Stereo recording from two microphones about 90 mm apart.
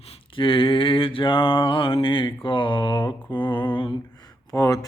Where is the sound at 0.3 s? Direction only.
75° left (ahead or behind).